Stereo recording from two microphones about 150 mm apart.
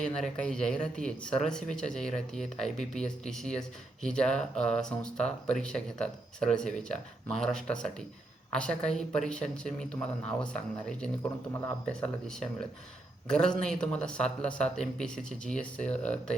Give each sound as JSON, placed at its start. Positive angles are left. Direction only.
{"t": 0.2, "sound": "speech", "side_deg": 5}
{"t": 11.2, "sound": "speech", "side_deg": 20}
{"t": 11.9, "sound": "speech", "side_deg": 5}